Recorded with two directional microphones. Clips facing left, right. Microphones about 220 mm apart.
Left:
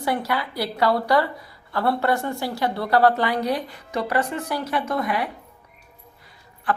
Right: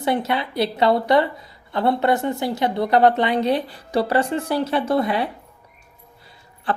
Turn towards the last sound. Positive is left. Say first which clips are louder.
# even
turn(degrees=-25)  # may be behind; listen again after turning